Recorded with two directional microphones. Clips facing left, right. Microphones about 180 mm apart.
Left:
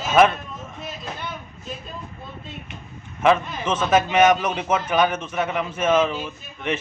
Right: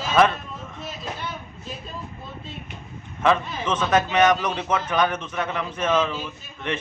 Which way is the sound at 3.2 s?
10° left (ahead or behind).